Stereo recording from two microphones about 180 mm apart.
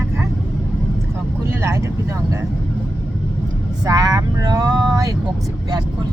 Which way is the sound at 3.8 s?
20° right (ahead or behind).